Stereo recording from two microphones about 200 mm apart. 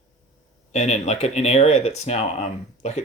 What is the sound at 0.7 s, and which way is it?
Speech, 35° left (ahead or behind).